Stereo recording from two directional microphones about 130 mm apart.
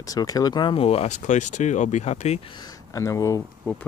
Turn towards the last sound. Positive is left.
turn(degrees=25)  # may be behind; listen again after turning